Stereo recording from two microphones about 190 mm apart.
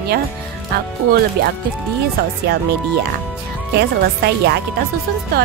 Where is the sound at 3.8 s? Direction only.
60° right (ahead or behind).